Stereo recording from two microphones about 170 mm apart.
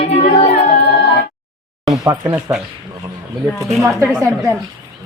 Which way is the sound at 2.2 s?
5° right (ahead or behind).